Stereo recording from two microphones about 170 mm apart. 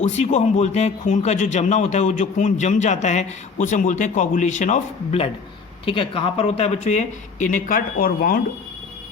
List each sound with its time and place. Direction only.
0.0 s a man's voice: 40° left (ahead or behind); by 8.4 s 60° left (ahead or behind)